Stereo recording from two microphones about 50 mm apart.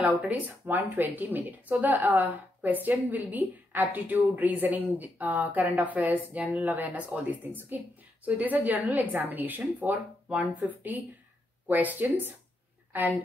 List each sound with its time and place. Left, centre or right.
0.3 s speech: right